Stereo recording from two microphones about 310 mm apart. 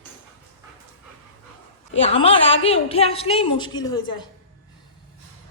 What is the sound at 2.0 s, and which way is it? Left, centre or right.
A woman's voice, centre.